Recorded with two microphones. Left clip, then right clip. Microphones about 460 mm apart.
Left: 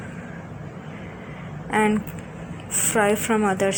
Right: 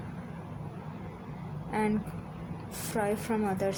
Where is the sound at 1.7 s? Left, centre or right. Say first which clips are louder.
Left 10 dB; left.